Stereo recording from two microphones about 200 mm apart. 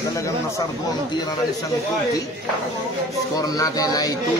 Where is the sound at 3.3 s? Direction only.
15° left (ahead or behind).